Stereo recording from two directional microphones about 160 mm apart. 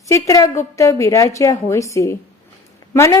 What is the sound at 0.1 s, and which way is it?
A woman's voice, 20° left (ahead or behind).